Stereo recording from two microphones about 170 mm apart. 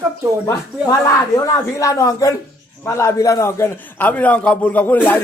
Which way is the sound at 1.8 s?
20° left (ahead or behind).